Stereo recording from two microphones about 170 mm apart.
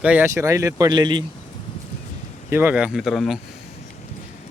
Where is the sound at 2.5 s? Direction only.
10° right (ahead or behind).